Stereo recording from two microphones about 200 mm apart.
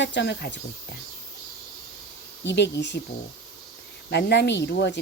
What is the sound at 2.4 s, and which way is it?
Speech, 60° left (ahead or behind).